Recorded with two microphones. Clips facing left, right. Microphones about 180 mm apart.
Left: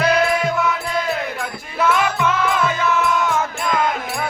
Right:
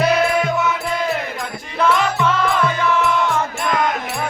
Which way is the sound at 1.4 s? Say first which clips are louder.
Right 1 dB; 10° left (ahead or behind).